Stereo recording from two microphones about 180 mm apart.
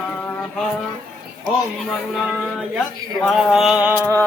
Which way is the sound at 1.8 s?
Centre (ahead or behind).